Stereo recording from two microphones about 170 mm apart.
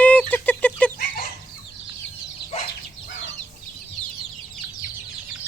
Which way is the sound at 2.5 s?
35° left (ahead or behind).